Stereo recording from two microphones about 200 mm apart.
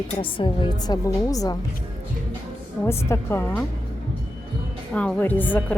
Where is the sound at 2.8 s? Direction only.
15° left (ahead or behind).